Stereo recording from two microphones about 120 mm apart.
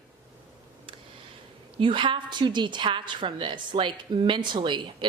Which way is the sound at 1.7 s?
45° right (ahead or behind).